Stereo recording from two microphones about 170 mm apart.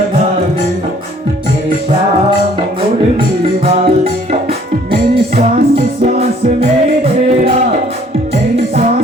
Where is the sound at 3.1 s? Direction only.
35° right (ahead or behind).